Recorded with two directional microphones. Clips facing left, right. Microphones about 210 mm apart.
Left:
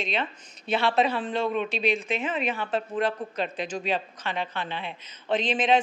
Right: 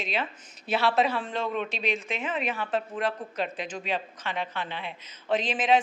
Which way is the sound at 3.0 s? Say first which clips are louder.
Left 2 dB; 5° right (ahead or behind).